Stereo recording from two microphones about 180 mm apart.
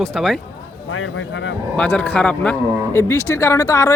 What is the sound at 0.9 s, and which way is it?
Speech, 90° left.